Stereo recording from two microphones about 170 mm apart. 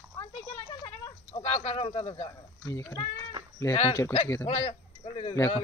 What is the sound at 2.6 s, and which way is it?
Speech, 20° left (ahead or behind).